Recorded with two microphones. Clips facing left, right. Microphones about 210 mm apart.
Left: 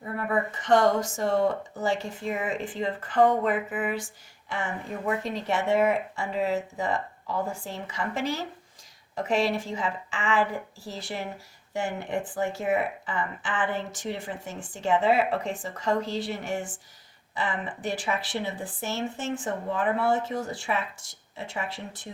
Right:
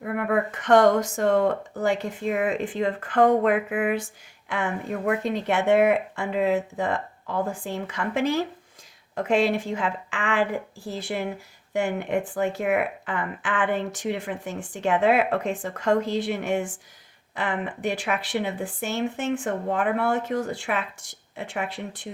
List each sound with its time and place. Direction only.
0.0 s speech: 70° right (ahead or behind)
9.1 s speech: 60° right (ahead or behind)
11.7 s speech: 65° right (ahead or behind)